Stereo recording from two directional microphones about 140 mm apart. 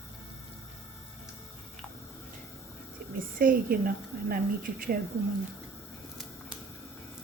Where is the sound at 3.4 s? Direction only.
90° right.